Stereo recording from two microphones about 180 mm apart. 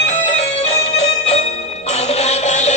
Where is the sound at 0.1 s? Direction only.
40° left (ahead or behind).